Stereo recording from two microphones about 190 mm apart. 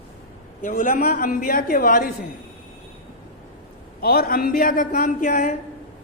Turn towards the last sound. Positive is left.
turn(degrees=45)  # may be behind; listen again after turning